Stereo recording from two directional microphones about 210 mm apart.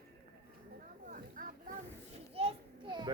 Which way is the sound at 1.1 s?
40° right (ahead or behind).